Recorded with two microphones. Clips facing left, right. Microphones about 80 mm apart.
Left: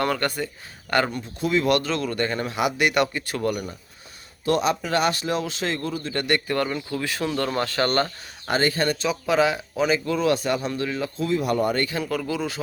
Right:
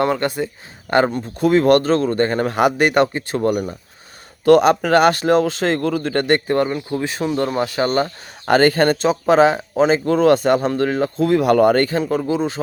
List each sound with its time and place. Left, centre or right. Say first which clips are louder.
0.0 s speech: right 5 dB; right
1.4 s speech: right 8 dB; right
4.4 s speech: right 10 dB; right; by 8.1 s centre
8.4 s speech: right 9 dB; right
11.3 s speech: right 9 dB; right
11.9 s speech: right 7 dB; right